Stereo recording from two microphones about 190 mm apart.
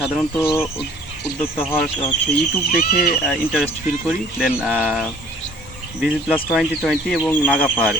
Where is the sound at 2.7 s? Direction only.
50° left (ahead or behind).